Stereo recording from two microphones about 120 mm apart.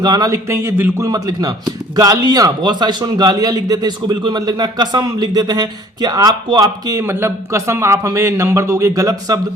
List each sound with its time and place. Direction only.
0.0 s a man's voice: 35° right (ahead or behind)
0.4 s a man's voice: 20° right (ahead or behind)
7.0 s speech: 20° right (ahead or behind)